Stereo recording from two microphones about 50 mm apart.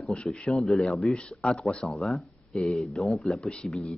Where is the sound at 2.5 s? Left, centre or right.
Left.